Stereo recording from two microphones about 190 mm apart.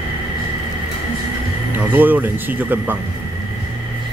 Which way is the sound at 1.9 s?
10° right (ahead or behind).